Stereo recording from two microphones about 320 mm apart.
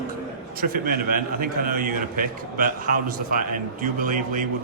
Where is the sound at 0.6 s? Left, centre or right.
Right.